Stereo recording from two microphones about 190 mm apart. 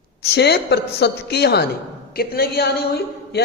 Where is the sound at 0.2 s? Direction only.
60° left (ahead or behind).